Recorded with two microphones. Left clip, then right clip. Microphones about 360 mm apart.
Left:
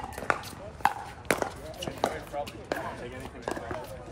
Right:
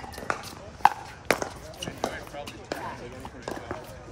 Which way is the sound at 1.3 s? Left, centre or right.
Centre.